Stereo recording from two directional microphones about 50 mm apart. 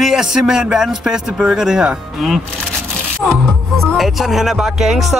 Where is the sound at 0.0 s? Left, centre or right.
Centre.